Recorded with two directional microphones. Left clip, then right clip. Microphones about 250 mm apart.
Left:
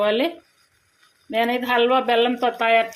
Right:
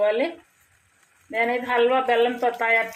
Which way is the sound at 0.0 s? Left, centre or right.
Left.